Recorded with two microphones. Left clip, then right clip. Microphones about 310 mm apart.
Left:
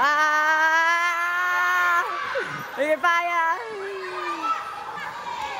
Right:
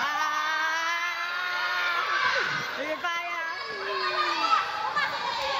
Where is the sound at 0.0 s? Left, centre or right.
Centre.